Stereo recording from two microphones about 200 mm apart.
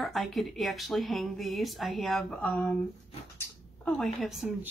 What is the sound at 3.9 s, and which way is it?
Speech, centre (ahead or behind).